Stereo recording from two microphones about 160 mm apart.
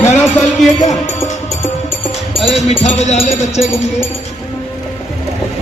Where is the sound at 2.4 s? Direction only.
45° left (ahead or behind).